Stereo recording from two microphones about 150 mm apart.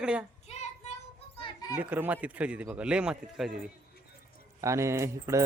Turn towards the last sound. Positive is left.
turn(degrees=-20)  # may be behind; listen again after turning